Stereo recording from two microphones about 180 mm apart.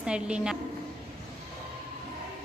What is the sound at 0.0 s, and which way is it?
Speech, 5° right (ahead or behind).